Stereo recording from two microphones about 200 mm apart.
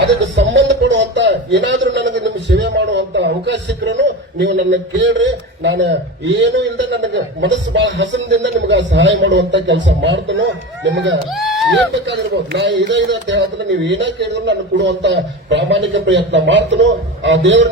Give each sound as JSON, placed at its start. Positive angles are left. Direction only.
{"t": 0.3, "sound": "a man's voice", "side_deg": -65}
{"t": 11.3, "sound": "speech", "side_deg": 0}
{"t": 11.9, "sound": "a man's voice", "side_deg": -60}